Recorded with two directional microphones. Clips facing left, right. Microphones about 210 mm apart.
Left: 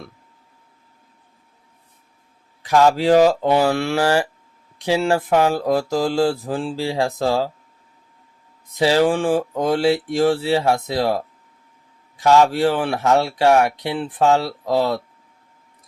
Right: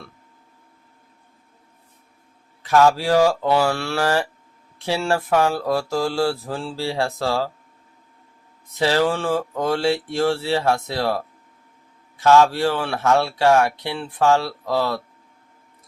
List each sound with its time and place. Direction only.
2.6 s speech: 15° left (ahead or behind)
8.6 s speech: 15° left (ahead or behind)
12.2 s speech: 15° left (ahead or behind)